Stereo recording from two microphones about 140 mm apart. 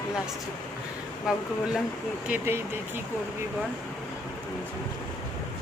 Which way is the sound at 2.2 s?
15° right (ahead or behind).